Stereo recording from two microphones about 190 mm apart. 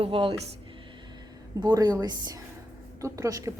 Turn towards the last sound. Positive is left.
turn(degrees=-15)  # may be behind; listen again after turning